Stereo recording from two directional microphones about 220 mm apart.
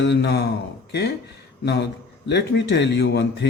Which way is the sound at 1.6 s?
50° left (ahead or behind).